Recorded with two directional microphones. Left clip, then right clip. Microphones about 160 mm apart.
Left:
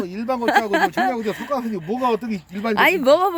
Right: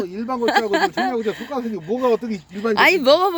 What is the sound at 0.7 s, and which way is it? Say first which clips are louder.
Speech: even; 15° left (ahead or behind).